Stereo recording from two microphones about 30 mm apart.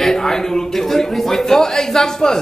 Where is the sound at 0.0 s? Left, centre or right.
Centre.